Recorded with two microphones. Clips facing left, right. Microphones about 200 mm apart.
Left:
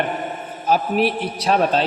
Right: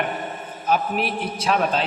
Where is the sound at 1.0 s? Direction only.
30° left (ahead or behind).